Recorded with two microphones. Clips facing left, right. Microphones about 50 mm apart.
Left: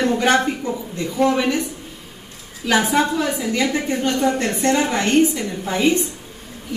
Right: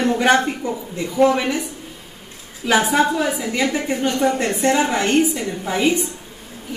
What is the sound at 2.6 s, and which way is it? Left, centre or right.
A woman's voice, centre.